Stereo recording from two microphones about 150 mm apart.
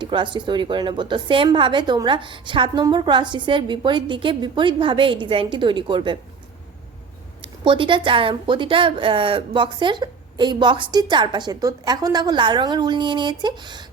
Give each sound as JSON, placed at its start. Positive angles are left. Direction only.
{"t": 0.0, "sound": "a woman's voice", "side_deg": -30}
{"t": 7.6, "sound": "a woman's voice", "side_deg": -35}